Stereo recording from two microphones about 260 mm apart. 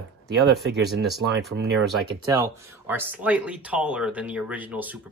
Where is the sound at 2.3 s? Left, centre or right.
Centre.